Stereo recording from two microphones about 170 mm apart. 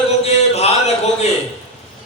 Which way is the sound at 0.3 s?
40° left (ahead or behind).